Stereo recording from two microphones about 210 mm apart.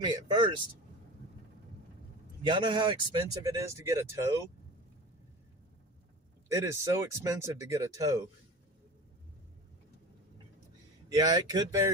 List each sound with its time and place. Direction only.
0.0 s speech: 20° right (ahead or behind)
2.4 s speech: 20° right (ahead or behind)
6.5 s speech: 15° right (ahead or behind)
11.1 s speech: 20° right (ahead or behind)